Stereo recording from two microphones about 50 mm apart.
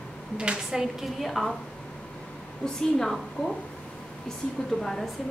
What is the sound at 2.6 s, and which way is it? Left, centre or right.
Speech, centre.